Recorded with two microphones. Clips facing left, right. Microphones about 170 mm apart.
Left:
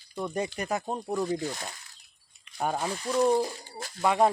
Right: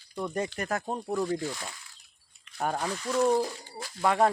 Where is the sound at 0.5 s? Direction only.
20° left (ahead or behind).